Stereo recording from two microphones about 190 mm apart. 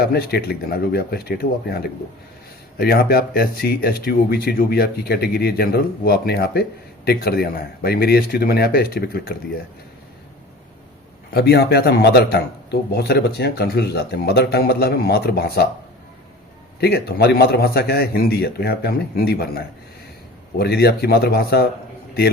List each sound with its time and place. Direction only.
0.0 s speech: 55° left (ahead or behind)
11.3 s speech: 55° left (ahead or behind)
16.8 s speech: 55° left (ahead or behind)